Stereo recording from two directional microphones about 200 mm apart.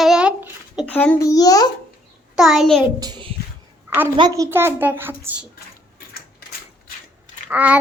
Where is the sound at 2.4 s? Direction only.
Centre (ahead or behind).